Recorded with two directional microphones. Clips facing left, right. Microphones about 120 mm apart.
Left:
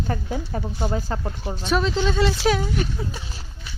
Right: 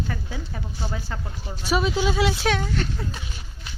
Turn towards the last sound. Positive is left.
turn(degrees=10)  # may be behind; listen again after turning